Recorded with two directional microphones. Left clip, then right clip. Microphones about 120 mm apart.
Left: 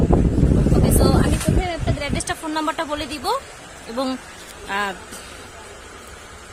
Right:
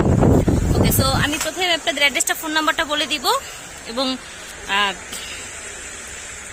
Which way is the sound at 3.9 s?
20° left (ahead or behind).